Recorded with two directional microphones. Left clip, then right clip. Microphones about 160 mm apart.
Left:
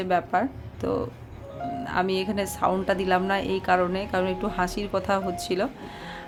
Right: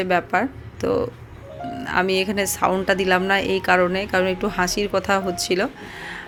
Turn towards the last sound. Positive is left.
turn(degrees=-10)  # may be behind; listen again after turning